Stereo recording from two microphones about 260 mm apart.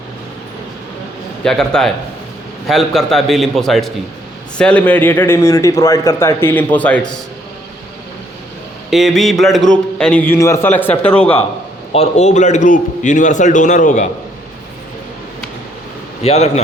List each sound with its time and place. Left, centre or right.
1.5 s a man's voice: centre
8.9 s a man's voice: centre
11.9 s a man's voice: left
16.2 s a man's voice: left